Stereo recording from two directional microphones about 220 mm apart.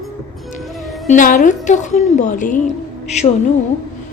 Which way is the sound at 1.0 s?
35° left (ahead or behind).